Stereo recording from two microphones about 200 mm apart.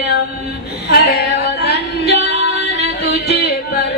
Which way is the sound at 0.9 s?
55° left (ahead or behind).